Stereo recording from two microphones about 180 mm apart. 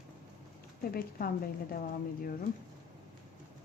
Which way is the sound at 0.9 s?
55° left (ahead or behind).